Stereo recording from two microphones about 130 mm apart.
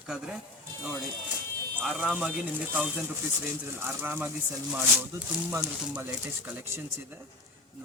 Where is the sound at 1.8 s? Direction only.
5° right (ahead or behind); by 6.0 s 20° right (ahead or behind).